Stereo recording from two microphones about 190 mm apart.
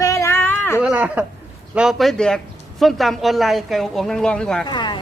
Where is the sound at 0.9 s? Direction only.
5° right (ahead or behind).